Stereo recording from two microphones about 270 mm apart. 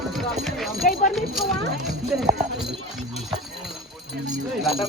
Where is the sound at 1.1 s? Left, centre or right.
Centre.